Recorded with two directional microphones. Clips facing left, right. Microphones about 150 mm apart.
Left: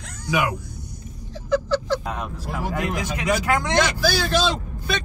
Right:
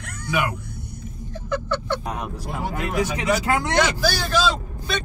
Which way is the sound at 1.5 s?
60° right (ahead or behind).